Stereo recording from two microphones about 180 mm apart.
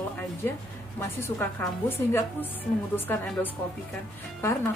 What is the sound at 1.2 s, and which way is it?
A woman's voice, 10° left (ahead or behind).